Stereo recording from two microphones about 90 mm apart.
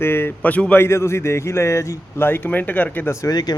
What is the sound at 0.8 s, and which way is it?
A man's voice, 30° left (ahead or behind).